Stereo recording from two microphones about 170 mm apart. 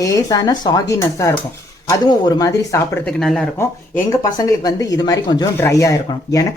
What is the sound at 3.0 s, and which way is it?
Speech, centre (ahead or behind).